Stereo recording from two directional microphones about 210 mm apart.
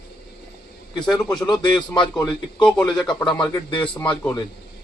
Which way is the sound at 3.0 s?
5° left (ahead or behind).